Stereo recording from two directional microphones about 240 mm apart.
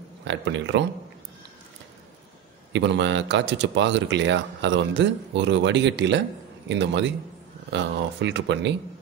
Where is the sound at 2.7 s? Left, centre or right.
Right.